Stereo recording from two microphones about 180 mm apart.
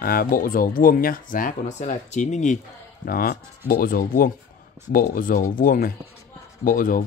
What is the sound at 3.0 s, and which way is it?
Speech, 55° left (ahead or behind).